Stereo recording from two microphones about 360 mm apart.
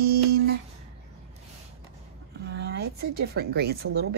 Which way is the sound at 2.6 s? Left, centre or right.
Right.